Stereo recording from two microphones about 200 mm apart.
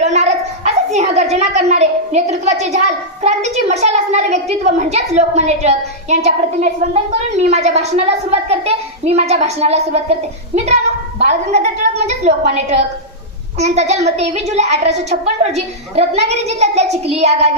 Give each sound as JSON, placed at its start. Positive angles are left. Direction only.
{"t": 0.0, "sound": "a child's voice", "side_deg": -35}